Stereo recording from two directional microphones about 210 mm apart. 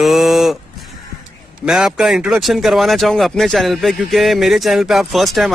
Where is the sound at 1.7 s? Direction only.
Centre (ahead or behind).